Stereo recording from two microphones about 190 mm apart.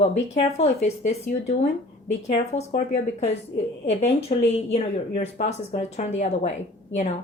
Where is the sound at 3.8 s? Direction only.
35° left (ahead or behind).